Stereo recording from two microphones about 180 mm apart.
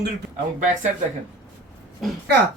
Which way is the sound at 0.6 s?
45° right (ahead or behind).